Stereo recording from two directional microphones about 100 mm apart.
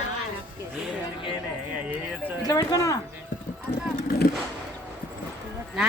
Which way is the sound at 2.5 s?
40° left (ahead or behind).